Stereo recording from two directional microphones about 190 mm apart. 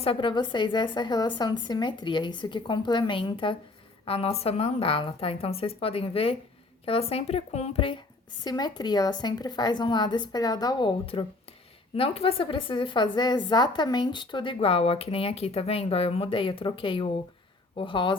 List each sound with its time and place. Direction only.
0.0 s a woman's voice: 25° left (ahead or behind)